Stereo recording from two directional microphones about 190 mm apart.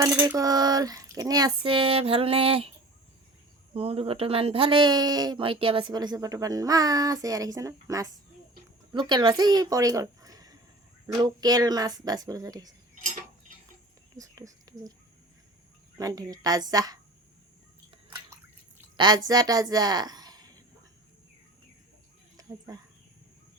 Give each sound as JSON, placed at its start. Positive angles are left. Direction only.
{"t": 0.0, "sound": "speech", "side_deg": -15}
{"t": 3.8, "sound": "speech", "side_deg": -30}
{"t": 14.2, "sound": "a sound", "side_deg": -20}
{"t": 16.0, "sound": "speech", "side_deg": -20}
{"t": 18.9, "sound": "a woman's voice", "side_deg": -20}
{"t": 22.4, "sound": "a sound", "side_deg": -20}